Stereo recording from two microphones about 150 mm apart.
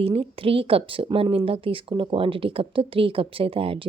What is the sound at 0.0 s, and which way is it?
A woman's voice, 40° right (ahead or behind).